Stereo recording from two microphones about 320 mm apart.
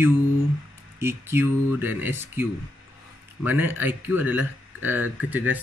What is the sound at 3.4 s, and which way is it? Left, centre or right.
Speech, centre.